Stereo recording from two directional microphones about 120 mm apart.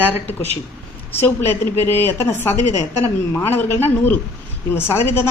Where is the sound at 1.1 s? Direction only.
20° left (ahead or behind).